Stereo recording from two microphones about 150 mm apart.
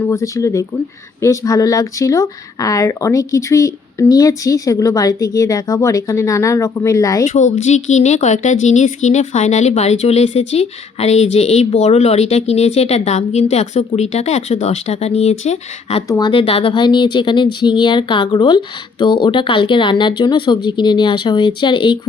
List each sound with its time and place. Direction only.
0.0 s speech: 20° left (ahead or behind)
7.3 s speech: 55° left (ahead or behind)
16.0 s speech: 25° left (ahead or behind)
16.3 s speech: 35° left (ahead or behind)